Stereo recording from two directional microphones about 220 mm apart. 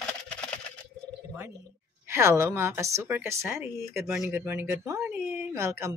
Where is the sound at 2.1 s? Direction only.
10° right (ahead or behind).